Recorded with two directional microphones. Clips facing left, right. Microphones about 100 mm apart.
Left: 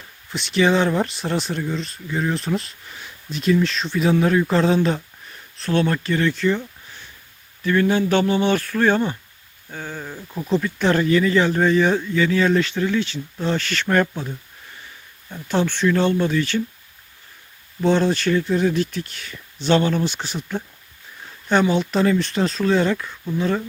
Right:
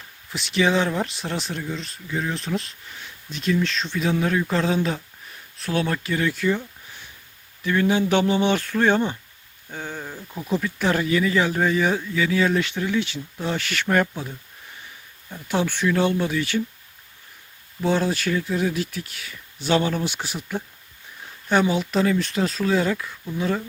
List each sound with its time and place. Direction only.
0.3 s speech: centre (ahead or behind)
7.6 s speech: 15° right (ahead or behind)
15.4 s speech: 10° right (ahead or behind)
17.8 s speech: 10° right (ahead or behind)